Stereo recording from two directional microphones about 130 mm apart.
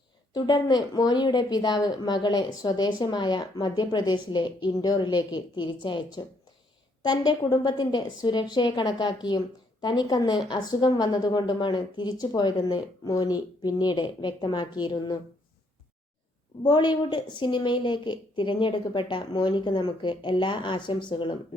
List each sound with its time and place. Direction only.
0.3 s a woman's voice: 35° left (ahead or behind)
16.6 s a woman's voice: 35° left (ahead or behind)